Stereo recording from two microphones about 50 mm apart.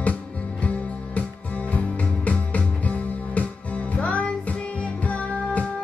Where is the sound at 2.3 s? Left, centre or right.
Left.